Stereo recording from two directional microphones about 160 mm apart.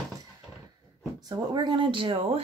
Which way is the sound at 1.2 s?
25° right (ahead or behind).